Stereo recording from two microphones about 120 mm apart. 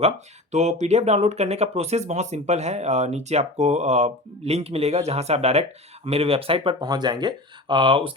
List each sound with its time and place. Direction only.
0.5 s speech: 70° right (ahead or behind); by 6.8 s 50° right (ahead or behind)
6.8 s speech: 35° right (ahead or behind)